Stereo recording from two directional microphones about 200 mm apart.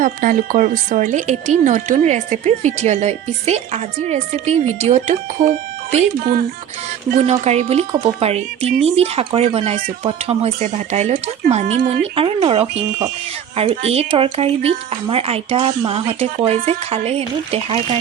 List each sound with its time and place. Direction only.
0.0 s a woman's voice: 40° right (ahead or behind)